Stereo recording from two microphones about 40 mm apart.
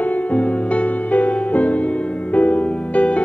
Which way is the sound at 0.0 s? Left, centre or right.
Left.